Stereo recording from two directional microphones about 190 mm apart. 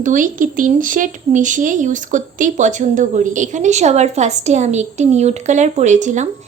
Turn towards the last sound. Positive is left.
turn(degrees=-40)  # may be behind; listen again after turning